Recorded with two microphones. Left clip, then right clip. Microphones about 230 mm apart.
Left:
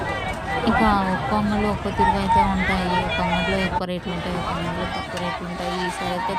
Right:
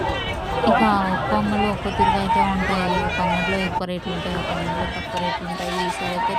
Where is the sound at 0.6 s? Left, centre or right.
Centre.